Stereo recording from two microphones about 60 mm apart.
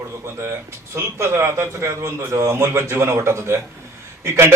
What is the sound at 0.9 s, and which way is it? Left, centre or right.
A man's voice, right.